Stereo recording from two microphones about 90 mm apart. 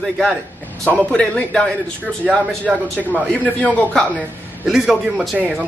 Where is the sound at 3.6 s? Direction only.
15° left (ahead or behind).